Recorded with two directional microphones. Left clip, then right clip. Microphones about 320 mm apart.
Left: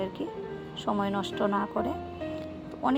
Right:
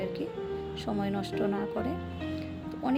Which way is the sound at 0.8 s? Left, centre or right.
Centre.